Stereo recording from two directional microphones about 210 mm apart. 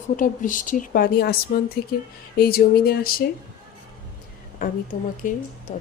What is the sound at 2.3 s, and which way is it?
Speech, 45° left (ahead or behind).